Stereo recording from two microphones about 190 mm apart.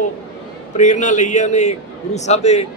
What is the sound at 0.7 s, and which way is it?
A man's voice, 40° left (ahead or behind).